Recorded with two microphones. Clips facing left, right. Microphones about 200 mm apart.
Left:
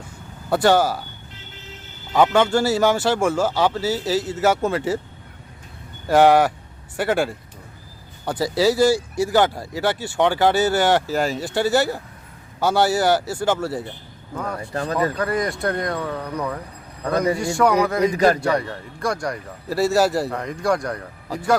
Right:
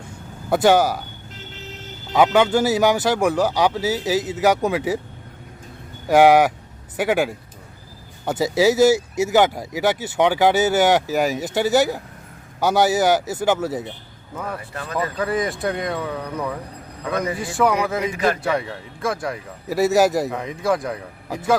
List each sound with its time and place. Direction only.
0.5 s speech: 15° right (ahead or behind)
2.1 s speech: 10° right (ahead or behind)
6.1 s speech: 15° right (ahead or behind)
14.6 s speech: 35° left (ahead or behind)
15.1 s speech: centre (ahead or behind)
18.0 s speech: 40° left (ahead or behind)
18.3 s speech: centre (ahead or behind)
19.6 s speech: 15° right (ahead or behind)
20.3 s speech: centre (ahead or behind)